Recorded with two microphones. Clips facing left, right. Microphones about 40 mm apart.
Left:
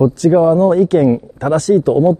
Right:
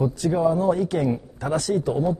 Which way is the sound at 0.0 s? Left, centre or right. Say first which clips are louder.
Left 10 dB; left.